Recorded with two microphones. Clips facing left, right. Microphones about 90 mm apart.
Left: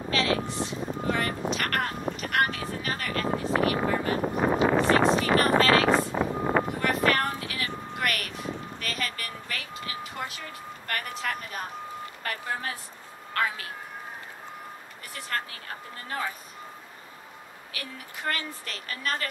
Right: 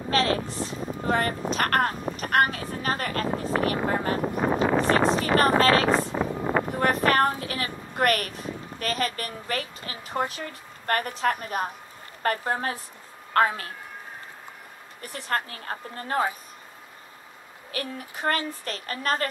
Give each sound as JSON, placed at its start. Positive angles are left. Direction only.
{"t": 0.1, "sound": "vehicle", "side_deg": -40}
{"t": 6.8, "sound": "a sound", "side_deg": -40}
{"t": 8.7, "sound": "a woman's voice", "side_deg": -35}
{"t": 15.3, "sound": "a woman's voice", "side_deg": -40}
{"t": 17.7, "sound": "a woman's voice", "side_deg": -40}